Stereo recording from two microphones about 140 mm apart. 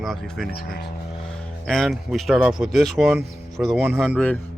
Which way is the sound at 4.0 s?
10° left (ahead or behind).